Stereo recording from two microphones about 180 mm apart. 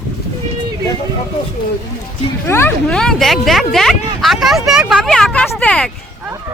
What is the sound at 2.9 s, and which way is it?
Speech, 5° left (ahead or behind).